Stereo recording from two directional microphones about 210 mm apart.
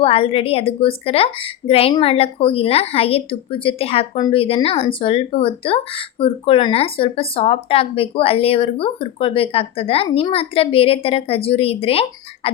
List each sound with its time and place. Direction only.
0.0 s a woman's voice: 25° left (ahead or behind)